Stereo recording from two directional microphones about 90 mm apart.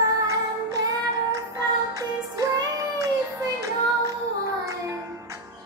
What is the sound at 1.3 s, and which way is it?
Music, 40° right (ahead or behind).